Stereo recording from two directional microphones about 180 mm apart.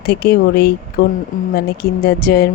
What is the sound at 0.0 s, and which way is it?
Speech, 60° left (ahead or behind).